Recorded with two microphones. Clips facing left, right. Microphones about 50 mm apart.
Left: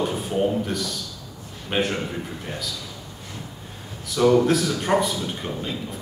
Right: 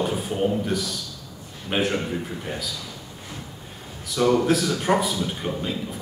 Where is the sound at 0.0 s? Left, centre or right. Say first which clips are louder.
Left 1 dB; centre.